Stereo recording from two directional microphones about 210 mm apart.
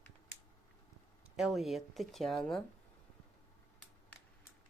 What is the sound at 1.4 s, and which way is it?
Speech, centre (ahead or behind).